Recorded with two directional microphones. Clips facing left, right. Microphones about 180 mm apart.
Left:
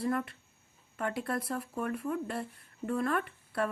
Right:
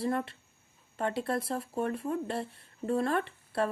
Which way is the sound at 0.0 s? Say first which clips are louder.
Right 1 dB; 30° right (ahead or behind).